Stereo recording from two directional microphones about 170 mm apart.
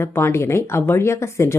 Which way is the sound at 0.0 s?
15° left (ahead or behind).